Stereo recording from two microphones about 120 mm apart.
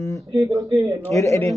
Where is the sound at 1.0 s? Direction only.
25° left (ahead or behind).